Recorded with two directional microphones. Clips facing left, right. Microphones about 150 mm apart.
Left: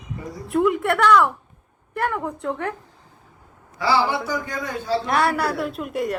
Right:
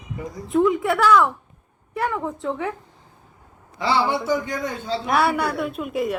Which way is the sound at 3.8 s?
20° right (ahead or behind).